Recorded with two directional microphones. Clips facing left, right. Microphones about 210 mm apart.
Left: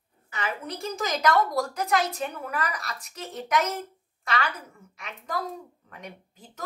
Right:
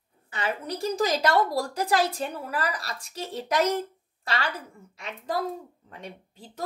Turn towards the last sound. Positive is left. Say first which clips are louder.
# right 2 dB
turn(degrees=-30)  # may be behind; listen again after turning